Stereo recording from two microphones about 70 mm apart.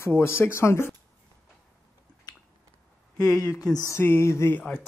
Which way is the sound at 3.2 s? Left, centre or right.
Left.